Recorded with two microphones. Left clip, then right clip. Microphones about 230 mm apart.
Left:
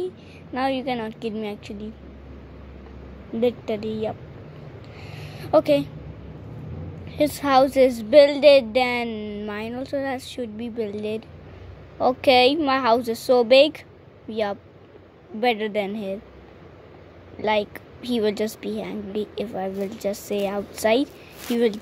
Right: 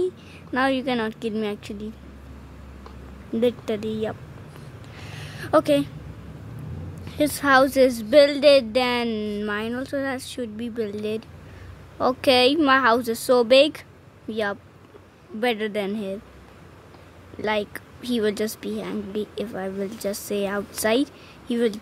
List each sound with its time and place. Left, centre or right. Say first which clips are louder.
0.0 s a woman's voice: right 4 dB; right
3.3 s a woman's voice: even; right
4.9 s a sound: right 3 dB; right
7.2 s a woman's voice: even; right
17.4 s a woman's voice: left 3 dB; right